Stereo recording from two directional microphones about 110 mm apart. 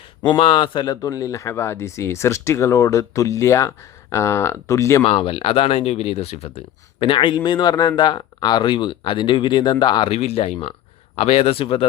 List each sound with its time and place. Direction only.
0.2 s a man's voice: 45° left (ahead or behind); by 5.0 s 25° left (ahead or behind)
5.0 s speech: 55° left (ahead or behind); by 6.5 s 70° left (ahead or behind)
7.0 s speech: 50° left (ahead or behind)
10.1 s speech: 70° left (ahead or behind)